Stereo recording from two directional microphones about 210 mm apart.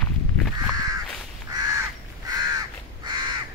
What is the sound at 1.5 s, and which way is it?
Crow, 20° right (ahead or behind).